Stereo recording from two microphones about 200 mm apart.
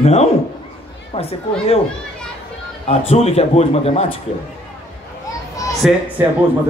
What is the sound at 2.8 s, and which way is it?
A man's voice, 30° left (ahead or behind).